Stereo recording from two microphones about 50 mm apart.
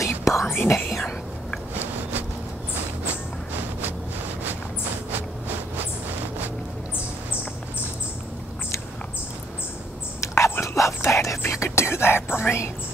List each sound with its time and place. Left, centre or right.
0.0 s whispering: left
0.5 s whispering: left
0.8 s whispering: centre
10.2 s a sound: left
10.6 s dog: left
11.0 s whispering: left